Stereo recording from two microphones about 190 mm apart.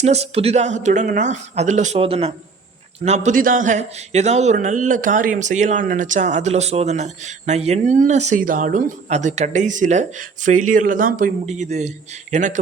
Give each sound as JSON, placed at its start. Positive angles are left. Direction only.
{"t": 0.0, "sound": "a man's voice", "side_deg": -35}